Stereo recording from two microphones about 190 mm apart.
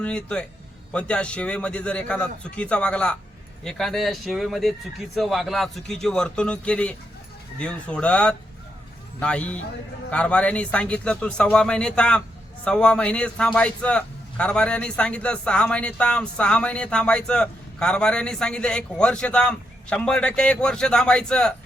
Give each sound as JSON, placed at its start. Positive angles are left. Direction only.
{"t": 0.0, "sound": "a man's voice", "side_deg": 5}